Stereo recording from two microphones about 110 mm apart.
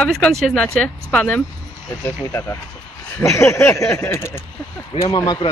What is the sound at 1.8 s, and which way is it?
Speech, 25° left (ahead or behind).